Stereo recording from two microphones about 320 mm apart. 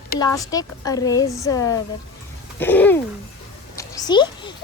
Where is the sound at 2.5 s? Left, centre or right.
Centre.